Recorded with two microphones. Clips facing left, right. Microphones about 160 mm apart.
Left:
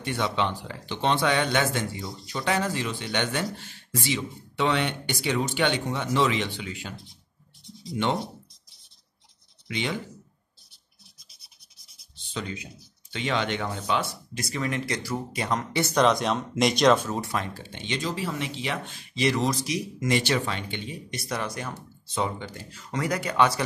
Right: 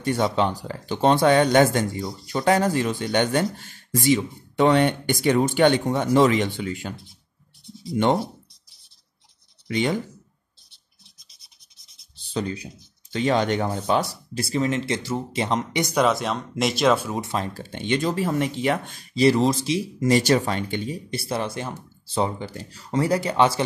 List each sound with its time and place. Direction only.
0.0 s speech: 40° right (ahead or behind)
7.9 s speech: 45° right (ahead or behind)
9.7 s speech: 45° right (ahead or behind)
12.2 s a sound: 35° right (ahead or behind)
13.1 s speech: 40° right (ahead or behind); by 17.2 s 10° right (ahead or behind)
17.2 s speech: 25° right (ahead or behind)
17.6 s speech: 45° right (ahead or behind); by 23.6 s 30° right (ahead or behind)